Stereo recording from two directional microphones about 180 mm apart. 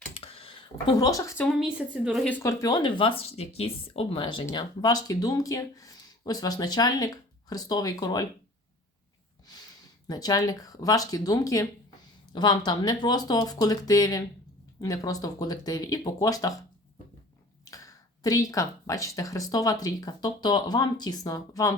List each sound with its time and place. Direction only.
0.1 s a sound: 30° left (ahead or behind)
1.4 s a woman's voice: centre (ahead or behind)
2.3 s speech: 15° left (ahead or behind)
10.1 s speech: 20° left (ahead or behind)
18.2 s speech: 20° left (ahead or behind)